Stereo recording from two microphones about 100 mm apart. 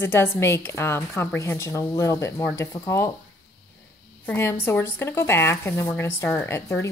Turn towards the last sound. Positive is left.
turn(degrees=30)  # may be behind; listen again after turning